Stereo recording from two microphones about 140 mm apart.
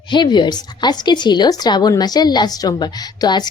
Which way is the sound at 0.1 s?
35° left (ahead or behind).